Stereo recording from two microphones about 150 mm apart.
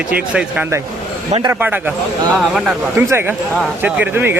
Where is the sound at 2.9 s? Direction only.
15° right (ahead or behind).